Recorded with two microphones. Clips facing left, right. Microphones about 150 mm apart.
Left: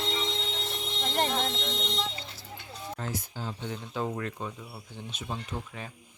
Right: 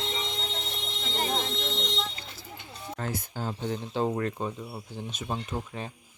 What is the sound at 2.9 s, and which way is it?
Speech, 50° right (ahead or behind).